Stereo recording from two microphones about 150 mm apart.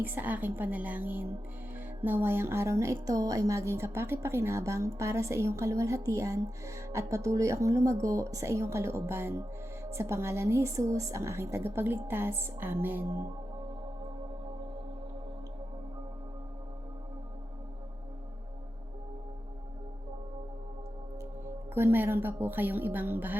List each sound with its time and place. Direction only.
0.0 s a woman's voice: 10° right (ahead or behind)
21.8 s a woman's voice: 15° right (ahead or behind)